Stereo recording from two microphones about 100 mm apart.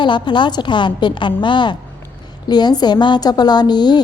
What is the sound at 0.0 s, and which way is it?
A woman's voice, 50° left (ahead or behind).